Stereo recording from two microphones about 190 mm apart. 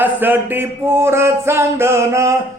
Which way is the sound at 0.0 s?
10° right (ahead or behind).